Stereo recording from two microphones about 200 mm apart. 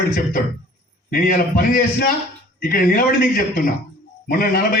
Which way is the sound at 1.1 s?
45° left (ahead or behind).